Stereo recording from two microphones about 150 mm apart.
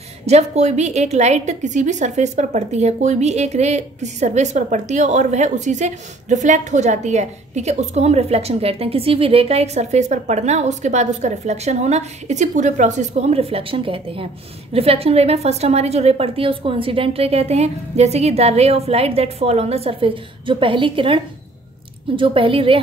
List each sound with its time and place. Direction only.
0.3 s a woman's voice: 50° right (ahead or behind)